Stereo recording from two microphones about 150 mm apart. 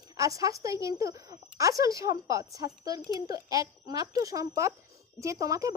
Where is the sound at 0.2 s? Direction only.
20° right (ahead or behind).